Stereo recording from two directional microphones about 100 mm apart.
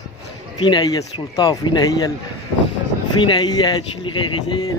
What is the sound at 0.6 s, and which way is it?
Speech, 45° left (ahead or behind).